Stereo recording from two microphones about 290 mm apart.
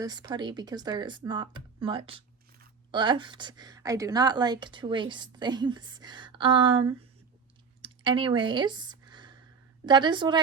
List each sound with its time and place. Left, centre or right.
0.0 s a woman's voice: centre
7.8 s a sound: centre
9.8 s a woman's voice: centre